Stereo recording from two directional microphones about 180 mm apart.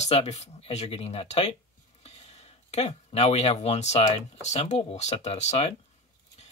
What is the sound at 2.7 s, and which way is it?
Speech, 35° left (ahead or behind).